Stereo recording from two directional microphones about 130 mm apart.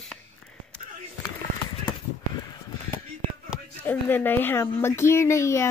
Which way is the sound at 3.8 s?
15° left (ahead or behind).